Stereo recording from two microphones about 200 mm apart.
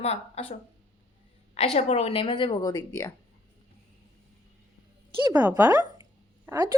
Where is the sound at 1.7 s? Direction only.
30° left (ahead or behind); by 3.1 s 15° left (ahead or behind).